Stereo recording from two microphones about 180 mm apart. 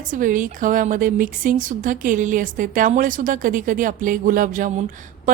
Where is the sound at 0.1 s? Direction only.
45° right (ahead or behind).